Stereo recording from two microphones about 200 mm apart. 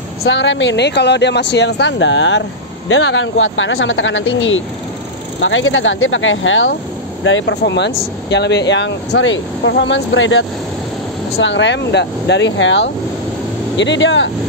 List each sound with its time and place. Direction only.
0.2 s speech: 65° left (ahead or behind)
11.4 s speech: 65° left (ahead or behind)